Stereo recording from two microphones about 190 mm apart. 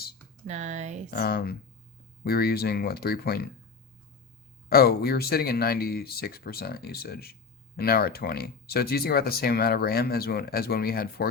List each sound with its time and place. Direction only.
0.4 s speech: 40° right (ahead or behind)
1.1 s speech: 55° left (ahead or behind)
4.7 s speech: 55° left (ahead or behind)